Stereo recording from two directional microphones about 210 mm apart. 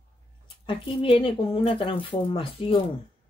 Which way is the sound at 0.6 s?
25° left (ahead or behind).